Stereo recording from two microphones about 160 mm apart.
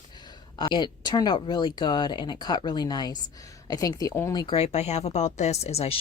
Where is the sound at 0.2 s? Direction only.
25° left (ahead or behind).